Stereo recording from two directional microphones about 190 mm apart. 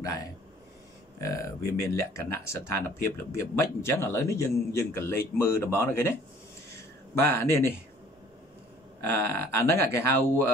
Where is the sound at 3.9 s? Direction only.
15° left (ahead or behind).